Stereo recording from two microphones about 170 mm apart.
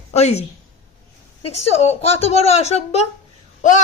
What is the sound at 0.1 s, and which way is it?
A woman's voice, 40° left (ahead or behind).